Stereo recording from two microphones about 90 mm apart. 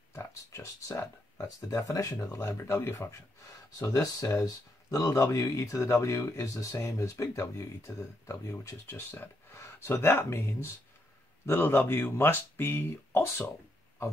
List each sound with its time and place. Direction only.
0.1 s speech: 30° left (ahead or behind)